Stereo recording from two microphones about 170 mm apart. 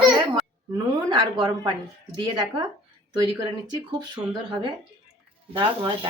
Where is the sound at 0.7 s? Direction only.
25° right (ahead or behind).